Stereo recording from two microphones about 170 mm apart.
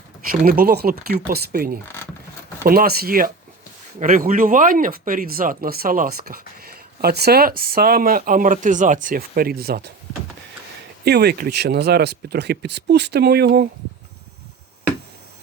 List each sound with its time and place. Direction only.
0.3 s speech: 60° right (ahead or behind)
11.0 s speech: 70° right (ahead or behind)